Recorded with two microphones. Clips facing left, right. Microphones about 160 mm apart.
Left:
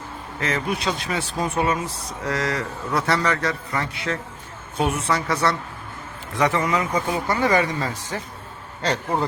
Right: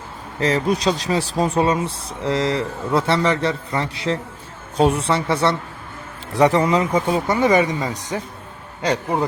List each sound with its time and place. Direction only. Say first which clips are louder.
0.3 s speech: right 6 dB; 35° right (ahead or behind); by 9.2 s 10° right (ahead or behind)